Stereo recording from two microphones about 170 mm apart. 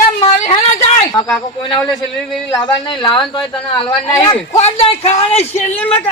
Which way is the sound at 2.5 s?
25° left (ahead or behind).